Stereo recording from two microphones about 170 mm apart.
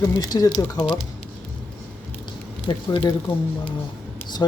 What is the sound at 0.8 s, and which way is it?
Speech, centre (ahead or behind).